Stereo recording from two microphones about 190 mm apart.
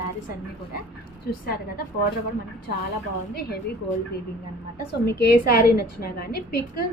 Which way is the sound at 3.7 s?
55° left (ahead or behind).